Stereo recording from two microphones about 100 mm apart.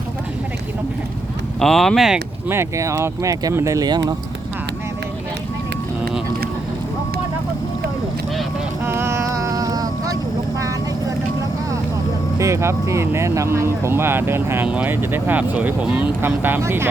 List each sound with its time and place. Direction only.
1.5 s speech: centre (ahead or behind)
2.5 s speech: 30° right (ahead or behind)
8.9 s vehicle: 25° right (ahead or behind)
12.4 s speech: 30° right (ahead or behind)